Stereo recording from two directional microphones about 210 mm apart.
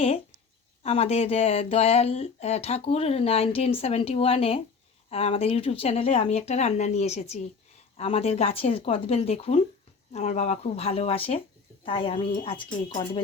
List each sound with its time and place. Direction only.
0.8 s speech: 30° left (ahead or behind)